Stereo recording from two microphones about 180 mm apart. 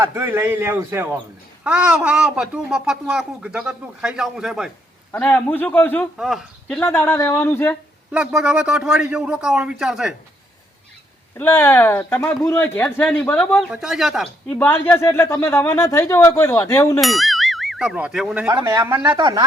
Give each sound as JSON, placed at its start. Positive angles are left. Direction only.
{"t": 0.0, "sound": "a man's voice", "side_deg": -15}
{"t": 5.1, "sound": "speech", "side_deg": 10}
{"t": 6.1, "sound": "speech", "side_deg": 0}
{"t": 6.8, "sound": "speech", "side_deg": 10}
{"t": 8.1, "sound": "speech", "side_deg": -5}
{"t": 11.3, "sound": "speech", "side_deg": 10}
{"t": 14.5, "sound": "speech", "side_deg": 10}
{"t": 17.0, "sound": "speech", "side_deg": 0}
{"t": 18.5, "sound": "a man's voice", "side_deg": -20}